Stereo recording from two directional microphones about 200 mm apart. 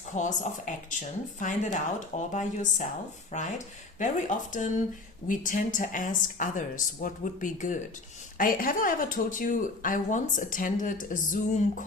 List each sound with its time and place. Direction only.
0.1 s speech: 40° left (ahead or behind)